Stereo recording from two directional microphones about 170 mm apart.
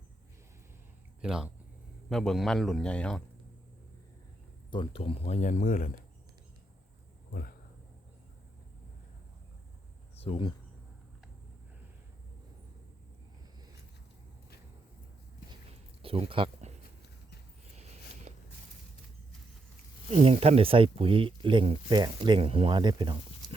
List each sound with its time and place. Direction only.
1.2 s a man's voice: 5° right (ahead or behind)
4.7 s speech: 30° left (ahead or behind); by 5.9 s 50° left (ahead or behind)
7.3 s speech: 60° left (ahead or behind)
10.2 s speech: 35° left (ahead or behind)
16.0 s a sound: 35° right (ahead or behind)
17.7 s a sound: 40° right (ahead or behind)
20.1 s speech: 40° right (ahead or behind)